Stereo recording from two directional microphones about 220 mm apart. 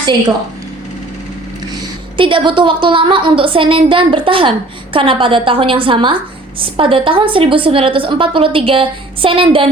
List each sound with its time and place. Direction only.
2.1 s a woman's voice: 20° right (ahead or behind)